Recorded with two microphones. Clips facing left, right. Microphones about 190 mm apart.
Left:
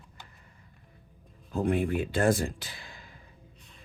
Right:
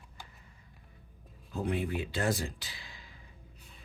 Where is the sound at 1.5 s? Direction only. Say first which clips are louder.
Left 6 dB; 50° left (ahead or behind).